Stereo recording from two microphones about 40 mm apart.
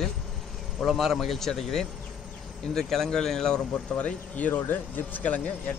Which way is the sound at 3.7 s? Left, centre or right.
Left.